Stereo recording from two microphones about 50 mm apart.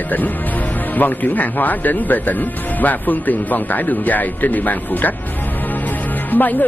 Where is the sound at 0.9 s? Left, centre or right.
Left.